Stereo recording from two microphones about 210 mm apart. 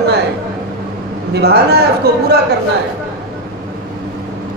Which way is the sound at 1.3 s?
50° right (ahead or behind).